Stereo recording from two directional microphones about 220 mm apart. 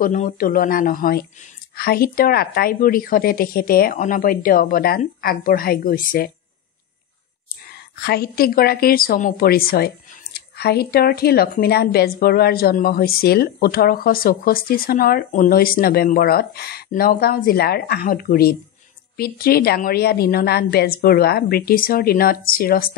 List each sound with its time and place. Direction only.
0.0 s a woman's voice: 35° left (ahead or behind)
7.7 s a woman's voice: 45° left (ahead or behind)